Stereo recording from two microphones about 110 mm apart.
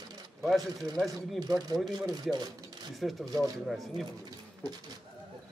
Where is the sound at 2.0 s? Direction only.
35° right (ahead or behind).